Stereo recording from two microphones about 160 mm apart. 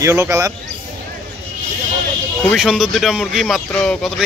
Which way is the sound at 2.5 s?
Centre (ahead or behind).